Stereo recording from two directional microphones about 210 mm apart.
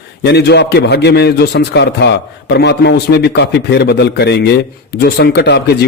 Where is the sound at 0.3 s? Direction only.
50° left (ahead or behind).